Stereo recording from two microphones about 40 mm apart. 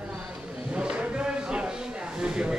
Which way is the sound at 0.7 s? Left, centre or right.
Right.